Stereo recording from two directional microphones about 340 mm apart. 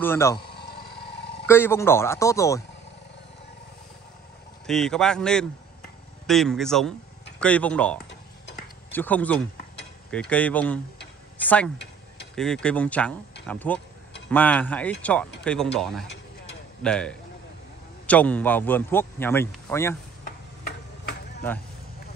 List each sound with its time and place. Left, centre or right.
0.0 s a man's voice: centre
0.4 s a sound: left
1.5 s a man's voice: centre
4.6 s a man's voice: centre